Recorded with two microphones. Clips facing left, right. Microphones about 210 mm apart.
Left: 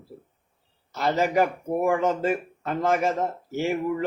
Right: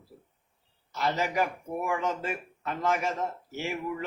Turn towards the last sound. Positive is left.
turn(degrees=40)  # may be behind; listen again after turning